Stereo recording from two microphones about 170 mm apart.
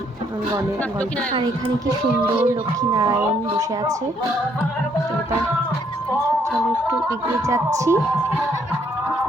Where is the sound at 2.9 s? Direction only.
25° right (ahead or behind).